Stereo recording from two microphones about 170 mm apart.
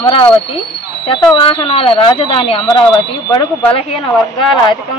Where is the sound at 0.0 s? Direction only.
30° left (ahead or behind).